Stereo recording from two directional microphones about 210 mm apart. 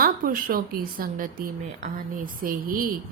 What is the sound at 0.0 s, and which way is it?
A woman's voice, 45° right (ahead or behind).